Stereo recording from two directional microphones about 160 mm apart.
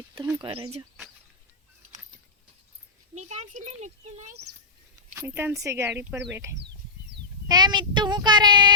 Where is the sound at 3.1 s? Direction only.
45° right (ahead or behind).